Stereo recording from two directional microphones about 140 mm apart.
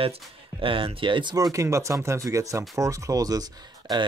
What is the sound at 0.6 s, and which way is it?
Speech, 40° right (ahead or behind).